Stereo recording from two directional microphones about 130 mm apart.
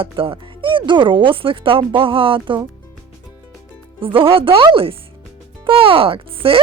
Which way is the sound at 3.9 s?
45° right (ahead or behind).